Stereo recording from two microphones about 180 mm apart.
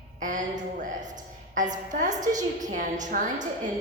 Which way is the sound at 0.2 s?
45° right (ahead or behind).